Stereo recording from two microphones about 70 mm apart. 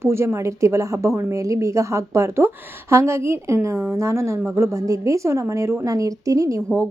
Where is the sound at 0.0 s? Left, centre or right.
Right.